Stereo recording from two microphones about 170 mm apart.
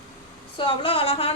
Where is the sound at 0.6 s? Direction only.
30° left (ahead or behind).